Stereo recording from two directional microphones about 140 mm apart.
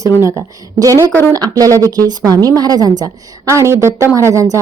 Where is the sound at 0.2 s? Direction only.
20° right (ahead or behind).